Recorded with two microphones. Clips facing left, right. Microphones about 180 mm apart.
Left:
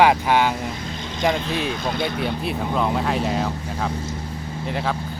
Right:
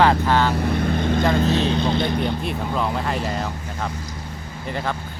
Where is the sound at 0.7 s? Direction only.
60° right (ahead or behind).